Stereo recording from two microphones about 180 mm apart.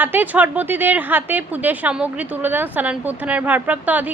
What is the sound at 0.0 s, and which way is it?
A woman's voice, 10° right (ahead or behind).